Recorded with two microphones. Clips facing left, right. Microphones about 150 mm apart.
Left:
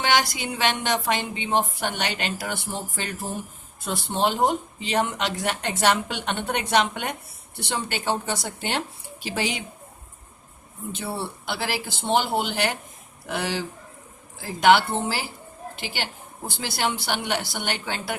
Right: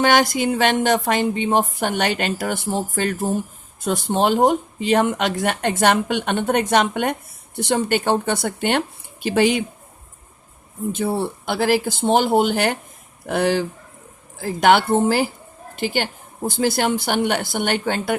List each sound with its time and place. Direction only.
0.0 s speech: 50° right (ahead or behind)
10.9 s a woman's voice: 50° right (ahead or behind)